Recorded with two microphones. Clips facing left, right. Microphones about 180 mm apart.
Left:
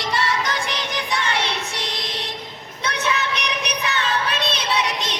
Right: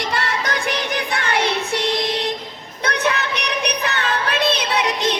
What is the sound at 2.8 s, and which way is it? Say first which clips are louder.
Music: right 3 dB; 60° right (ahead or behind).